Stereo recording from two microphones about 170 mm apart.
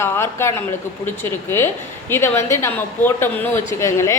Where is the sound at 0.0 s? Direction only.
15° left (ahead or behind).